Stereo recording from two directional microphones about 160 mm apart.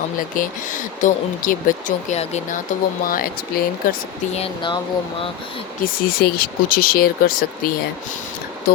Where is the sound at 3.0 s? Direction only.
65° left (ahead or behind).